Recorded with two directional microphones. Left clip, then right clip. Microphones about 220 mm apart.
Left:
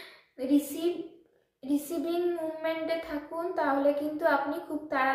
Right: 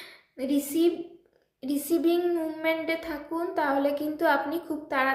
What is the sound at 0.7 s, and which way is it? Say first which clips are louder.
Speech: right 7 dB; 45° right (ahead or behind).